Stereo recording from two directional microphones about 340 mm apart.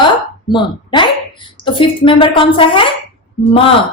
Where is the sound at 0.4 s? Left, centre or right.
Centre.